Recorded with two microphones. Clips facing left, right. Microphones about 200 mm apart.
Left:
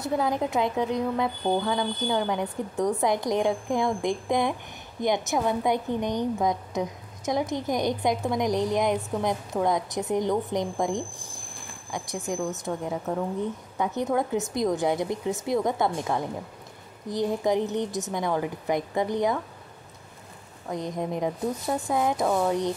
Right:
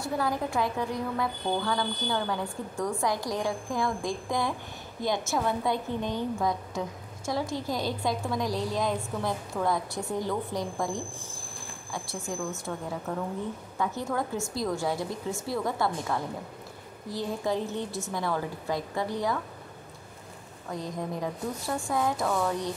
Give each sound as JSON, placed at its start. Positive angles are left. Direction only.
{"t": 0.0, "sound": "a woman's voice", "side_deg": 20}
{"t": 20.7, "sound": "a woman's voice", "side_deg": 20}